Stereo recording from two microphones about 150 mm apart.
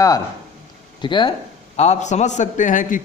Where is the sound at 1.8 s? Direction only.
50° left (ahead or behind).